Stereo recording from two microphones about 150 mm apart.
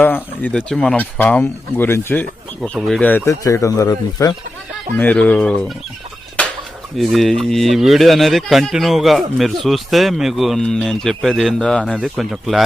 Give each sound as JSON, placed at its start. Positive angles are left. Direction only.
{"t": 0.0, "sound": "speech", "side_deg": 10}
{"t": 2.7, "sound": "speech", "side_deg": 0}
{"t": 3.0, "sound": "speech", "side_deg": 10}
{"t": 4.9, "sound": "speech", "side_deg": 10}
{"t": 6.9, "sound": "speech", "side_deg": 0}